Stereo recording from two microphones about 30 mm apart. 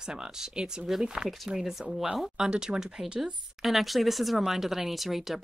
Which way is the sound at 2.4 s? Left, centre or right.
Right.